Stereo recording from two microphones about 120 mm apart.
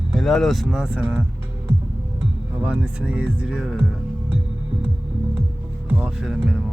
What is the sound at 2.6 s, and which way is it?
Speech, 10° right (ahead or behind).